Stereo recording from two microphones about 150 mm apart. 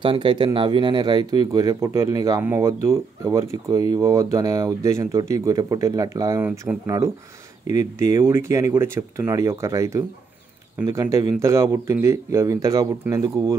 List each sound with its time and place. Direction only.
0.0 s speech: 35° right (ahead or behind)
7.7 s speech: 20° right (ahead or behind)